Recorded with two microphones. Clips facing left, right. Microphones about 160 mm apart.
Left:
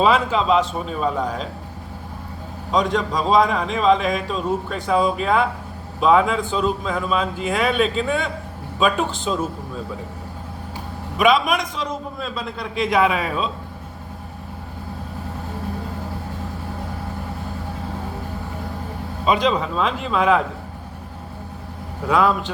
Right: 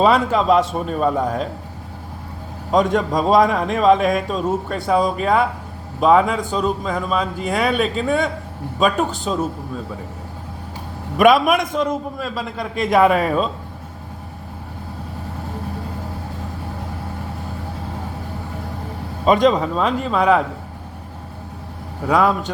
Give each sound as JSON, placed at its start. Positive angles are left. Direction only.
{"t": 0.0, "sound": "speech", "side_deg": -45}
{"t": 2.7, "sound": "a man's voice", "side_deg": -50}
{"t": 11.2, "sound": "speech", "side_deg": -55}
{"t": 19.2, "sound": "speech", "side_deg": -45}
{"t": 22.0, "sound": "speech", "side_deg": -45}